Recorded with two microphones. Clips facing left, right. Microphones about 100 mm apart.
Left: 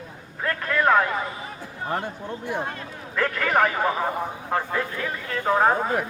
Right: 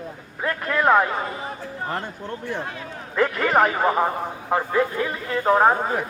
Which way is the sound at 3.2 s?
25° right (ahead or behind).